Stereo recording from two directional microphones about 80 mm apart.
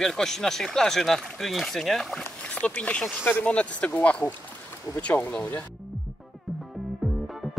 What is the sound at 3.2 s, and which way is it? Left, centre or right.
Speech, left.